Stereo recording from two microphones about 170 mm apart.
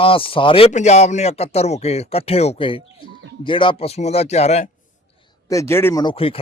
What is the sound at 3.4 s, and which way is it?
Speech, 30° left (ahead or behind).